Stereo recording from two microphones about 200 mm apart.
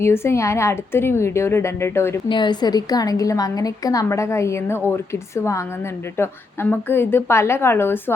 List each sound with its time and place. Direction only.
0.0 s a woman's voice: 10° left (ahead or behind)